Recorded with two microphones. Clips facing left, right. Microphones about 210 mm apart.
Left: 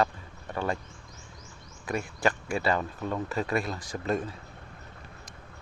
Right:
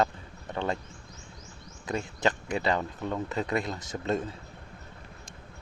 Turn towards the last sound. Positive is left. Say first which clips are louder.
# even
turn(degrees=-25)  # may be behind; listen again after turning